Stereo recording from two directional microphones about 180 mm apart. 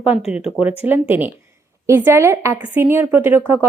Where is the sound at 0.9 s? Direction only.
10° right (ahead or behind).